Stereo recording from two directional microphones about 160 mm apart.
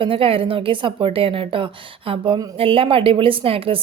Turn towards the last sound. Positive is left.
turn(degrees=-35)  # may be behind; listen again after turning